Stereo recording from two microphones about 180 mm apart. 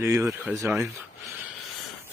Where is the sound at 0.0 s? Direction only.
15° right (ahead or behind).